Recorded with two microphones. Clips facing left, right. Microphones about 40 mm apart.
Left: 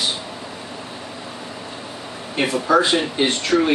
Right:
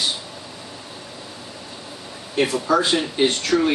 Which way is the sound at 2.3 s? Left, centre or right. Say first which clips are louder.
Left 2 dB; centre.